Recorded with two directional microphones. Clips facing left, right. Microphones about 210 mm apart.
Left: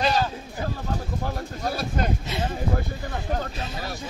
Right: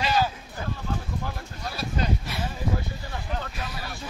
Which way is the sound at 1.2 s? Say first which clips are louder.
Left 6 dB; 45° left (ahead or behind).